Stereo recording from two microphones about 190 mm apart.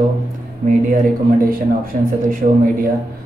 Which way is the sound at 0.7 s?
45° right (ahead or behind).